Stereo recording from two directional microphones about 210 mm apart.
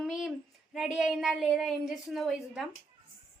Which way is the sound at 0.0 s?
Centre (ahead or behind).